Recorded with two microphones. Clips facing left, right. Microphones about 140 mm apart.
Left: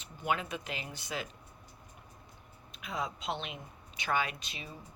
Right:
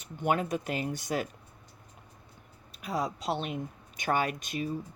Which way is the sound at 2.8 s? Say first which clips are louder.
Right 5 dB; 40° right (ahead or behind).